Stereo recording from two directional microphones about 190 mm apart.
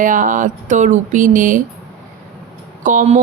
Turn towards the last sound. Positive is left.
turn(degrees=-40)  # may be behind; listen again after turning